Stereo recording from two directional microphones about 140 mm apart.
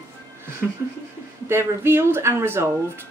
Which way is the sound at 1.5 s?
15° right (ahead or behind).